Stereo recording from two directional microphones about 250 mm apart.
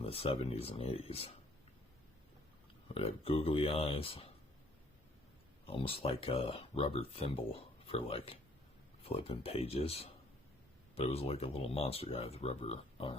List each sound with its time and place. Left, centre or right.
0.0 s speech: left
2.9 s speech: left
5.6 s speech: left